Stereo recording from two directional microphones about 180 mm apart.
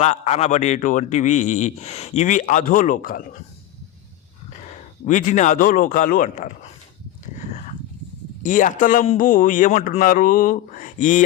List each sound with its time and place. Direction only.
0.0 s a man's voice: 40° left (ahead or behind)
5.0 s a man's voice: 45° left (ahead or behind)
8.4 s a man's voice: 45° left (ahead or behind)